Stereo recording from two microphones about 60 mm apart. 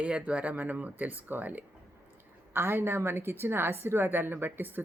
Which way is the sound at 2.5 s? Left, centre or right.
Right.